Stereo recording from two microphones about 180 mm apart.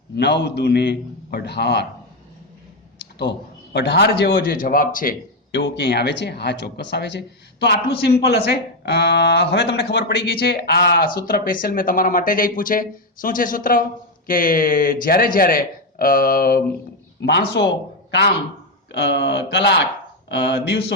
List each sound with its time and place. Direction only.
0.2 s speech: 70° left (ahead or behind)
3.2 s speech: 70° left (ahead or behind); by 5.1 s 50° left (ahead or behind)
5.5 s speech: 75° left (ahead or behind); by 16.6 s 55° left (ahead or behind)
17.2 s speech: 70° left (ahead or behind)